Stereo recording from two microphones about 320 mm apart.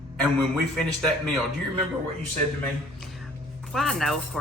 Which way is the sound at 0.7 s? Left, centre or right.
Centre.